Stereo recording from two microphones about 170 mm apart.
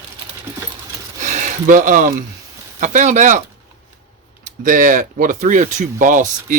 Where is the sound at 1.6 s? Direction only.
50° right (ahead or behind).